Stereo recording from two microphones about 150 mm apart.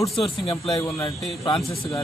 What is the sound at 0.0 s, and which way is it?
Speech, centre (ahead or behind).